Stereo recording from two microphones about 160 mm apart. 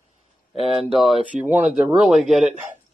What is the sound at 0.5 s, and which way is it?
Speech, centre (ahead or behind).